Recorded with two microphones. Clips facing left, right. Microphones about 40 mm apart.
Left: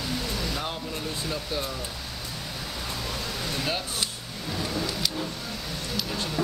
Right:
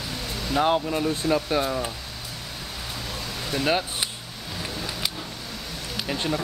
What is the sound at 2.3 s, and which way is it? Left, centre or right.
Vehicle, centre.